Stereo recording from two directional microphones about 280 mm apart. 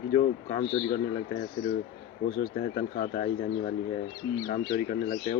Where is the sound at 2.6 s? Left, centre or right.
Left.